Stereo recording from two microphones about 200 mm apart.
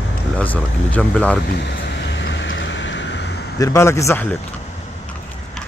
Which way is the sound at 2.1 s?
65° left (ahead or behind).